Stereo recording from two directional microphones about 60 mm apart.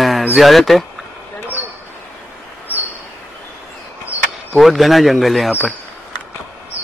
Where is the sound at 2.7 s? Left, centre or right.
Left.